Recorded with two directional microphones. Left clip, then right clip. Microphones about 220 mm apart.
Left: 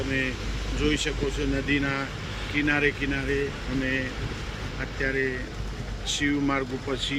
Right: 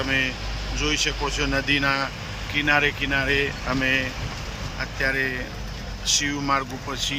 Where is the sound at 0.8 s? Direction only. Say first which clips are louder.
Right 3 dB; 5° left (ahead or behind).